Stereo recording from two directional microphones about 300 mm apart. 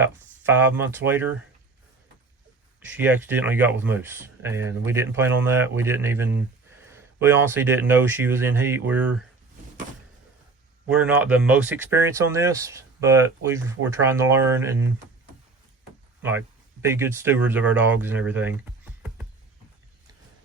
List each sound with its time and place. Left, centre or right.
0.0 s speech: centre
2.8 s speech: centre
10.8 s speech: centre
16.9 s speech: centre